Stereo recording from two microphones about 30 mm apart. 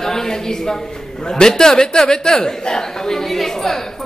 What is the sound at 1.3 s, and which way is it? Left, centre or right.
A man's voice, left.